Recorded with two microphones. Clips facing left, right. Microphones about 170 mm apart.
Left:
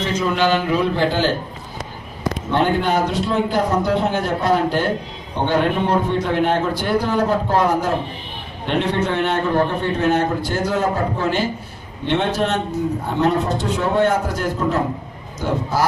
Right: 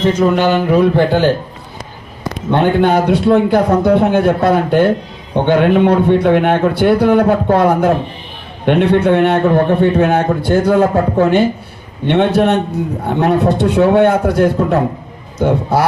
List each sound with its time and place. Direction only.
0.2 s a man's voice: 55° right (ahead or behind)
2.5 s a man's voice: 60° right (ahead or behind)